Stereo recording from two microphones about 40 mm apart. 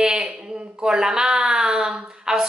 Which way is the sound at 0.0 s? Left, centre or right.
Centre.